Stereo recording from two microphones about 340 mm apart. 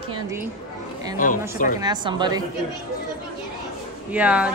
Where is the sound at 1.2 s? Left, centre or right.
Left.